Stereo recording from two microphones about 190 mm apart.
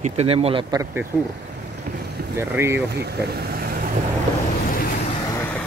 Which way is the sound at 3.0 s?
55° right (ahead or behind).